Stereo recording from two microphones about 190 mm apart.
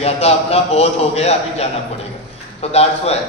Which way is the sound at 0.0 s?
35° left (ahead or behind).